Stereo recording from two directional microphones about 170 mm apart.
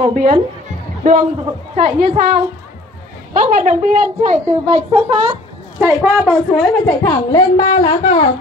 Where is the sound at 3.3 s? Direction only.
50° right (ahead or behind).